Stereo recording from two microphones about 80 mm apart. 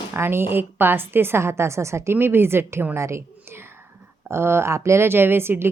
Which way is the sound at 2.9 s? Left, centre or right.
Right.